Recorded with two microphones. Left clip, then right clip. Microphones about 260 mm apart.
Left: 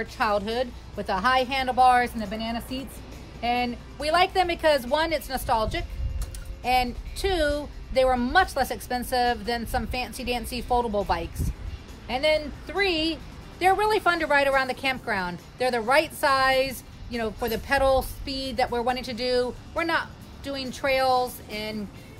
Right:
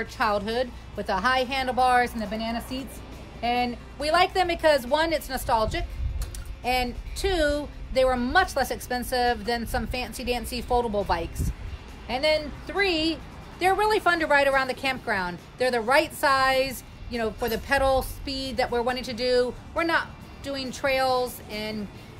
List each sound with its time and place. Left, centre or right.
0.0 s a woman's voice: centre